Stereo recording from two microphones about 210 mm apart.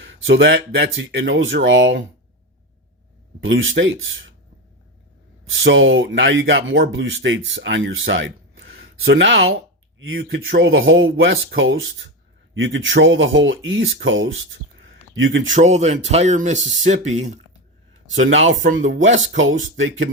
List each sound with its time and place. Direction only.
0.0 s speech: 65° right (ahead or behind)
3.4 s speech: 65° right (ahead or behind)
5.6 s speech: 65° right (ahead or behind)
15.5 s speech: 35° right (ahead or behind)
18.1 s speech: 65° right (ahead or behind)